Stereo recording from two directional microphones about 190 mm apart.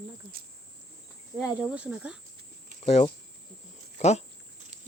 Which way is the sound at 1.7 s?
5° right (ahead or behind).